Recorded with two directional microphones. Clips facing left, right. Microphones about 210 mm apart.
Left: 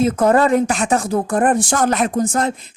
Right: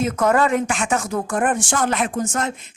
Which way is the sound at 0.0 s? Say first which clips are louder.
Left 4 dB; 30° left (ahead or behind).